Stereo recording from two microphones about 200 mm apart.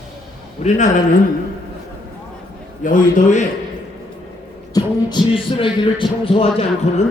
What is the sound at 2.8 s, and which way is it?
Speech, 40° left (ahead or behind).